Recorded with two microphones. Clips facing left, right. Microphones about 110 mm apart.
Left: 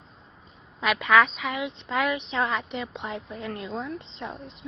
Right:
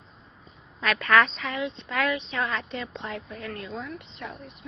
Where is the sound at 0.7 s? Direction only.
20° left (ahead or behind).